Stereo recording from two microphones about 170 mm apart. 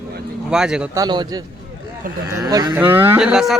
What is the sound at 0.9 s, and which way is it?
A man's voice, 25° right (ahead or behind).